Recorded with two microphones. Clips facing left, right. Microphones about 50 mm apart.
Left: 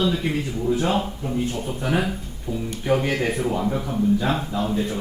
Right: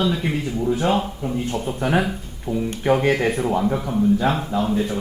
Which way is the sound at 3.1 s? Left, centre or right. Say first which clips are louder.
Right 3 dB; centre.